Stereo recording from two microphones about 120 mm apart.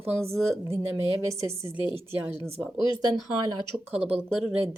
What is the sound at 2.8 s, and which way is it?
Speech, 40° left (ahead or behind).